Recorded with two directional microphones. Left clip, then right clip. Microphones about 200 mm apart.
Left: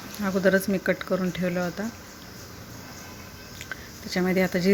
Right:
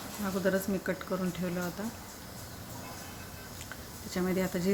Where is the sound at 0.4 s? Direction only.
25° left (ahead or behind).